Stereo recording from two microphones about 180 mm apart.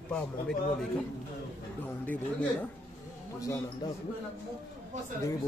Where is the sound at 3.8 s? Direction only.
25° left (ahead or behind).